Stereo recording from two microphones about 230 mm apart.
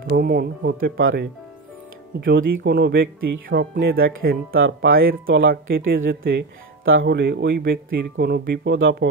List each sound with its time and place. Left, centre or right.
0.1 s speech: right
2.1 s speech: right
3.4 s speech: right
4.6 s speech: right